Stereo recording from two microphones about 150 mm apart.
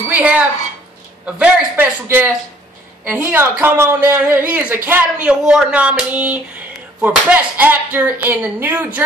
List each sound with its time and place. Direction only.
0.1 s speech: 10° right (ahead or behind)
3.5 s speech: 15° right (ahead or behind)